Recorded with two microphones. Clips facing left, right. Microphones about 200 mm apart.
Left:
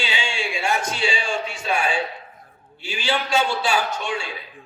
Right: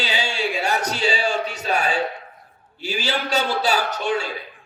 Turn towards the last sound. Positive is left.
turn(degrees=-40)  # may be behind; listen again after turning